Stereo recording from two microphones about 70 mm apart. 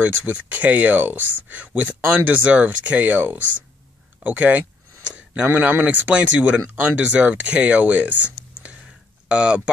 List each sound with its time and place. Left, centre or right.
0.0 s speech: right